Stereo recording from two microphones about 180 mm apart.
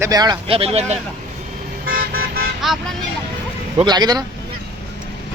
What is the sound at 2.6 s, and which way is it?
Speech, centre (ahead or behind).